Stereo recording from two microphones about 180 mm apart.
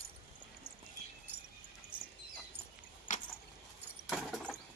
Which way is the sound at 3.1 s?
45° left (ahead or behind).